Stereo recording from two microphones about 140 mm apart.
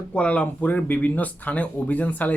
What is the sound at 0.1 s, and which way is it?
Speech, 10° left (ahead or behind).